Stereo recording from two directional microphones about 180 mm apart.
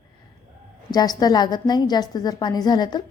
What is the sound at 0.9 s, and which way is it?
A woman's voice, 20° left (ahead or behind).